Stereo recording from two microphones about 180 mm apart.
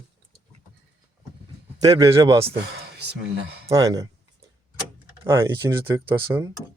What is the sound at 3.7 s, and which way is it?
Speech, 20° right (ahead or behind).